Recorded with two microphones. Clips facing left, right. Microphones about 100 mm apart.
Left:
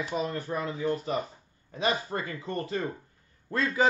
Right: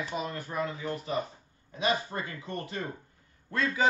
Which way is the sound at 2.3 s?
30° left (ahead or behind).